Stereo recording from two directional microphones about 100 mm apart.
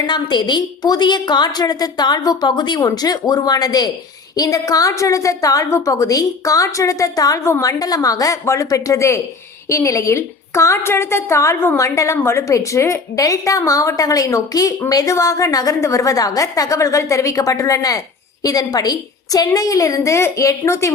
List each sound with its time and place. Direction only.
0.1 s a woman's voice: 50° left (ahead or behind); by 20.9 s 30° left (ahead or behind)